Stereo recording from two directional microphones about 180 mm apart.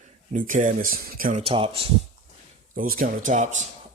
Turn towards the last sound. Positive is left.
turn(degrees=-40)  # may be behind; listen again after turning